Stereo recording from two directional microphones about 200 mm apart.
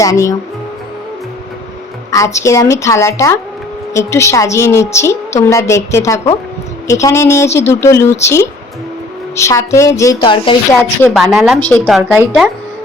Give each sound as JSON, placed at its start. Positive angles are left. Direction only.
{"t": 0.0, "sound": "a woman's voice", "side_deg": 15}
{"t": 2.0, "sound": "a woman's voice", "side_deg": 15}
{"t": 11.1, "sound": "a woman's voice", "side_deg": 0}